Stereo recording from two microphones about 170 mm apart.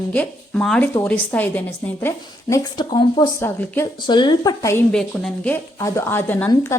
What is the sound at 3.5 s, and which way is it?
Speech, 15° left (ahead or behind).